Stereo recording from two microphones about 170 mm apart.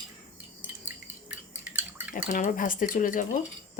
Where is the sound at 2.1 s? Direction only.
50° left (ahead or behind).